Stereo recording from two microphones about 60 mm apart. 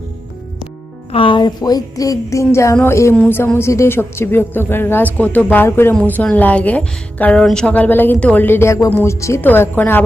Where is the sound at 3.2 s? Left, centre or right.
Left.